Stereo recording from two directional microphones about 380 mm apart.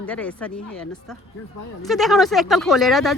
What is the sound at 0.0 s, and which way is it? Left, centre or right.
Speech, centre.